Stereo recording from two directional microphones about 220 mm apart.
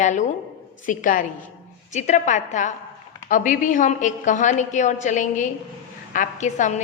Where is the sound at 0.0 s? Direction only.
35° left (ahead or behind).